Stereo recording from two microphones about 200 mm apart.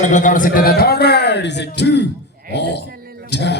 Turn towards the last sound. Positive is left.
turn(degrees=60)  # may be behind; listen again after turning